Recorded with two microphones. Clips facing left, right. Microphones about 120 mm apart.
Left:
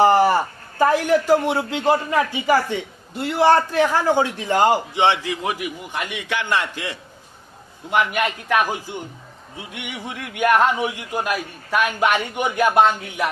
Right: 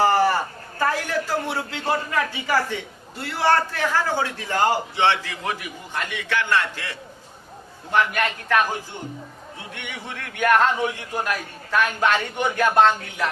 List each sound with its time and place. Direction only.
0.0 s a man's voice: 20° left (ahead or behind)